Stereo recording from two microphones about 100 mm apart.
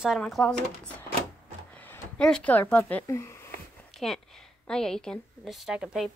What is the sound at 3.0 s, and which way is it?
Speech, 30° left (ahead or behind).